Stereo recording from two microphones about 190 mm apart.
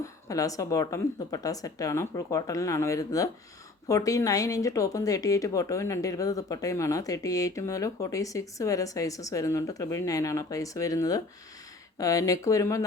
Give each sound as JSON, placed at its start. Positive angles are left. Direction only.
{"t": 0.0, "sound": "speech", "side_deg": 15}